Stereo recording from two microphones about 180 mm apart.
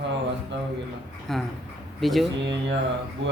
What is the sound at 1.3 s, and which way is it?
Speech, centre (ahead or behind).